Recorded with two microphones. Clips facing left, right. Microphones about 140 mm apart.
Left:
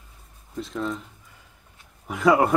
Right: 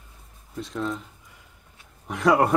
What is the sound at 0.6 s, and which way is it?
Speech, centre (ahead or behind).